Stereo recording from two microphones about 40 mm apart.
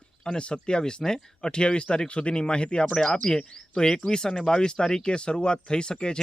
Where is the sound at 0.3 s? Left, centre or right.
Left.